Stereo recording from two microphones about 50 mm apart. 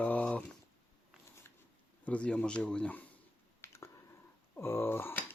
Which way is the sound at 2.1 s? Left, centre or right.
Left.